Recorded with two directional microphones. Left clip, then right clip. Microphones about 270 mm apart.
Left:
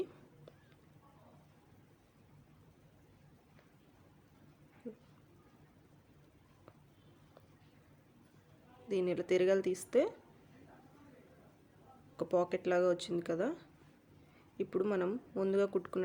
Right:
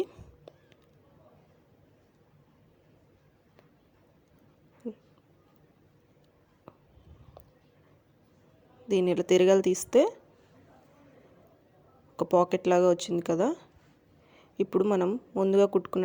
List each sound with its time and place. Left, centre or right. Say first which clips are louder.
4.8 s speech: right 9 dB; right
8.9 s speech: right 9 dB; right
12.1 s speech: right 9 dB; right